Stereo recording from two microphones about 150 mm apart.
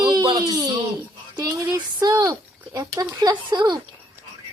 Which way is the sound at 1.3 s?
25° right (ahead or behind).